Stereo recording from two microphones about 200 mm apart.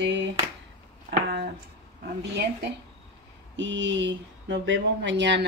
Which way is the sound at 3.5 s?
65° right (ahead or behind).